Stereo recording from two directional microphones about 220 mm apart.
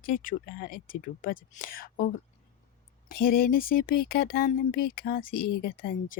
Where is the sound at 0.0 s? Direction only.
40° left (ahead or behind).